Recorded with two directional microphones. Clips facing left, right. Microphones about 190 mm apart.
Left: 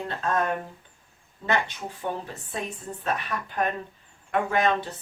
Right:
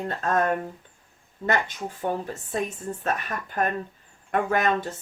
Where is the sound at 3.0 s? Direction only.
45° right (ahead or behind).